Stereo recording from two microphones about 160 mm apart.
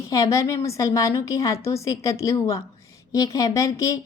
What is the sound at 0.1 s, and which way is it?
A woman's voice, 20° left (ahead or behind).